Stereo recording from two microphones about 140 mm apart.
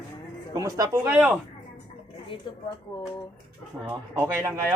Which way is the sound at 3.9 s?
15° right (ahead or behind).